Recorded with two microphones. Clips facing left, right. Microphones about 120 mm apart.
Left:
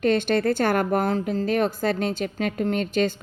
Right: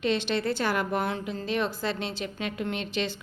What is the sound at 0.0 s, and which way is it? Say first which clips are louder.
Speech: left 6 dB; 50° left (ahead or behind).